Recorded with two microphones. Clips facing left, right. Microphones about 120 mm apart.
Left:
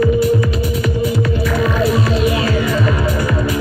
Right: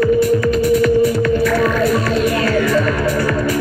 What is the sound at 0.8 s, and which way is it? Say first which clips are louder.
Music: right 5 dB; 15° left (ahead or behind).